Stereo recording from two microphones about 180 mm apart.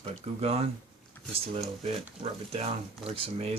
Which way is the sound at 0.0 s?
35° right (ahead or behind).